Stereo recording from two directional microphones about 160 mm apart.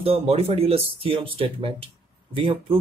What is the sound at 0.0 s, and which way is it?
Speech, 35° right (ahead or behind).